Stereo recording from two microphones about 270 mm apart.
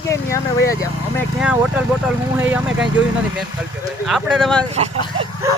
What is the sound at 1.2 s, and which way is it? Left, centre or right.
Speech, centre.